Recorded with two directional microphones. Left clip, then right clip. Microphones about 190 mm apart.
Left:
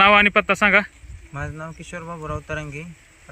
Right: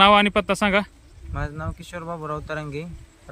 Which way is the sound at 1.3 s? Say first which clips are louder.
Even; 20° right (ahead or behind).